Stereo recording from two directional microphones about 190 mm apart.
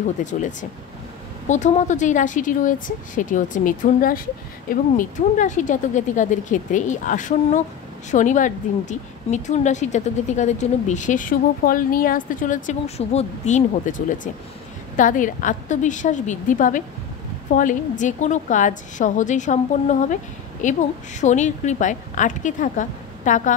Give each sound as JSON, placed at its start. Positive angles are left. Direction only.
{"t": 0.2, "sound": "a woman's voice", "side_deg": 40}